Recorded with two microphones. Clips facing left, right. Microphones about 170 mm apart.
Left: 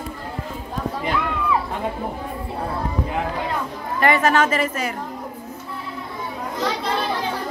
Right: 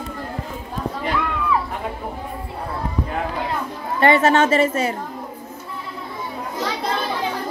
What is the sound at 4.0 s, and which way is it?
Speech, 25° right (ahead or behind).